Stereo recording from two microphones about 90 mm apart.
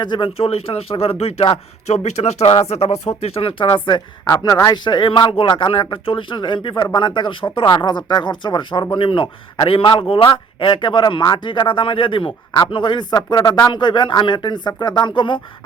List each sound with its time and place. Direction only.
0.0 s speech: 65° left (ahead or behind); by 2.3 s 90° left
3.3 s speech: 85° left; by 4.0 s 65° left (ahead or behind)
4.3 s speech: 40° left (ahead or behind)
4.8 s speech: 55° left (ahead or behind)